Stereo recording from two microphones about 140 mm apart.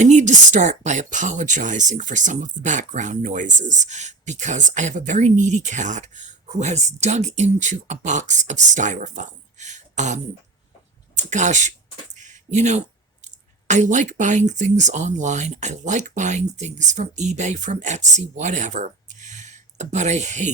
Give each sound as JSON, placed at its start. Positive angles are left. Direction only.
{"t": 0.0, "sound": "speech", "side_deg": -60}
{"t": 12.1, "sound": "a sound", "side_deg": -60}
{"t": 13.2, "sound": "speech", "side_deg": -60}